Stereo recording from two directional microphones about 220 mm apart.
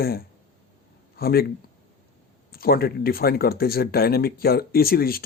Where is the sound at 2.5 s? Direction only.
45° left (ahead or behind).